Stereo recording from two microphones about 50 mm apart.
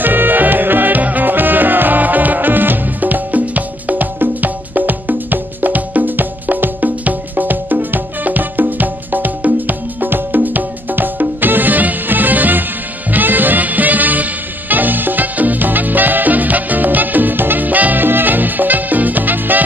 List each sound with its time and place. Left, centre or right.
0.0 s music: right